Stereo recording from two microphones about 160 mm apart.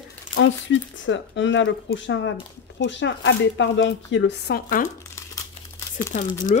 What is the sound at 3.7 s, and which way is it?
Speech, 90° left.